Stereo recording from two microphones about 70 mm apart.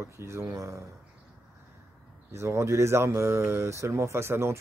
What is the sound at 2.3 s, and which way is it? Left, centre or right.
Speech, right.